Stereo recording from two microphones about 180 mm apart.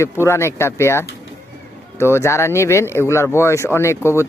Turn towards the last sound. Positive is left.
turn(degrees=15)  # may be behind; listen again after turning